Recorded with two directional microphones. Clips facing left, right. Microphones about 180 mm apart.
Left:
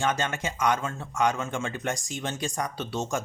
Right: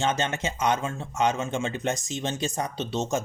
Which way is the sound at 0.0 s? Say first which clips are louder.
Right 1 dB; 25° right (ahead or behind).